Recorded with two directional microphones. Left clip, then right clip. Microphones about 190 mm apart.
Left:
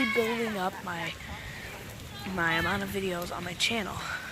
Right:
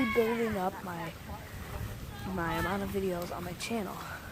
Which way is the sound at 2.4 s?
Centre (ahead or behind).